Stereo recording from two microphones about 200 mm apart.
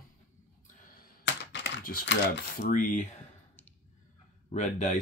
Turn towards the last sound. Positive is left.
turn(degrees=35)  # may be behind; listen again after turning